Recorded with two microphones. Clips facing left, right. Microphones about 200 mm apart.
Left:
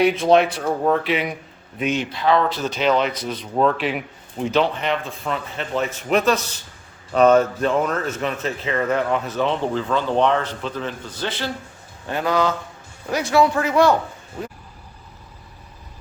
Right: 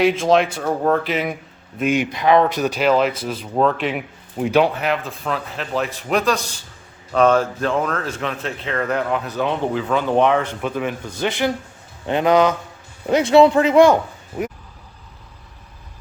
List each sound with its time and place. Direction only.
0.5 s speech: centre (ahead or behind)
1.8 s speech: 10° right (ahead or behind)
9.5 s speech: 10° right (ahead or behind)